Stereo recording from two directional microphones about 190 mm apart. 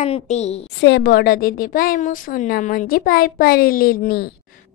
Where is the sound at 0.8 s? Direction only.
60° left (ahead or behind).